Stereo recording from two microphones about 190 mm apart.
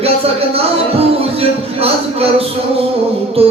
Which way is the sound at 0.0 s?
30° right (ahead or behind).